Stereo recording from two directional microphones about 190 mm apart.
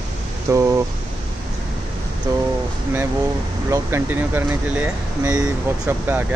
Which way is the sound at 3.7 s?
10° right (ahead or behind).